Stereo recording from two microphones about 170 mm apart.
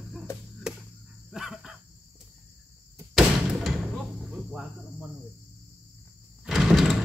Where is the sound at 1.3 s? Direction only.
Centre (ahead or behind).